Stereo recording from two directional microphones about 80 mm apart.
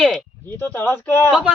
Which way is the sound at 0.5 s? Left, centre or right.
Left.